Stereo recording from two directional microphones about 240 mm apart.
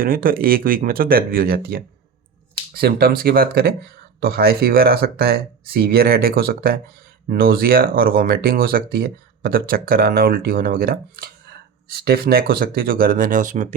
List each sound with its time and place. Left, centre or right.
0.0 s speech: right